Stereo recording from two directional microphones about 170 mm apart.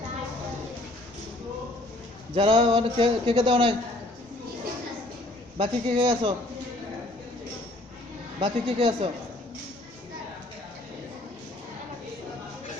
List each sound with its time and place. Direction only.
2.3 s a man's voice: 30° right (ahead or behind)
5.5 s a man's voice: 30° right (ahead or behind)
8.4 s a man's voice: 30° right (ahead or behind)